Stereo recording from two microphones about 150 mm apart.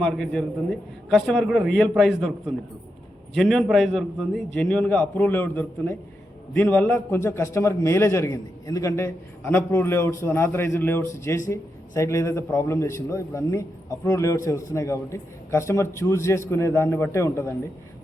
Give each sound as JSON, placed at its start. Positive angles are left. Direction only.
{"t": 0.0, "sound": "a man's voice", "side_deg": 5}
{"t": 3.3, "sound": "a man's voice", "side_deg": 0}